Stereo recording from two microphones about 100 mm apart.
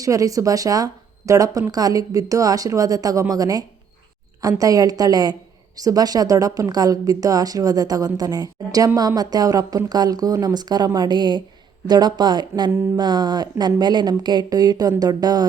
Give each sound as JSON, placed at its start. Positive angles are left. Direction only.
{"t": 0.0, "sound": "a woman's voice", "side_deg": -35}